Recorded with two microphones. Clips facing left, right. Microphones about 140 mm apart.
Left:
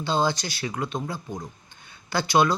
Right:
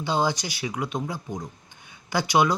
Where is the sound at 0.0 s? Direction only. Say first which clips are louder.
Even; 15° right (ahead or behind).